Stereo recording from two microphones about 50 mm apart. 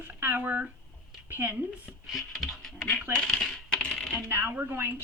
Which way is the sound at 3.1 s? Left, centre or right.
Centre.